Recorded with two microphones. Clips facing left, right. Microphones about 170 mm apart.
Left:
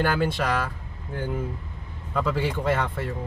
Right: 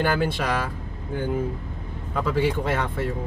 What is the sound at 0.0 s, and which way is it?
Speech, 10° right (ahead or behind).